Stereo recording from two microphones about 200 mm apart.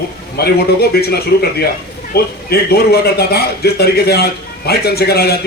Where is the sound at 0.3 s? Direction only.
50° left (ahead or behind).